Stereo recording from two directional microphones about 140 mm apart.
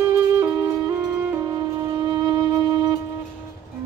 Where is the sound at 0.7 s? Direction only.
25° right (ahead or behind).